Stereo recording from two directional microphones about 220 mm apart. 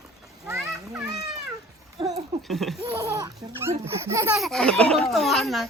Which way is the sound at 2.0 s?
25° right (ahead or behind).